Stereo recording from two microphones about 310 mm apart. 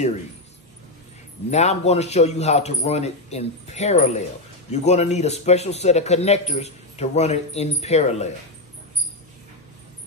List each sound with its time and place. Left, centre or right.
1.5 s a man's voice: left